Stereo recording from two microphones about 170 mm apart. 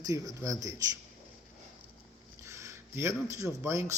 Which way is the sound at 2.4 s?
15° right (ahead or behind).